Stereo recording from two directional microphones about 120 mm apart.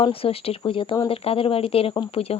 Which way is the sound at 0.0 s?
50° left (ahead or behind).